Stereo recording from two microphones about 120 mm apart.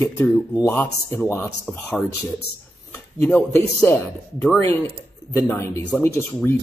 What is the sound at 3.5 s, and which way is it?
Speech, 20° left (ahead or behind).